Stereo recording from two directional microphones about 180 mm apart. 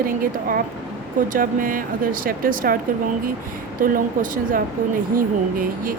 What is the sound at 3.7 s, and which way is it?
Speech, 50° right (ahead or behind).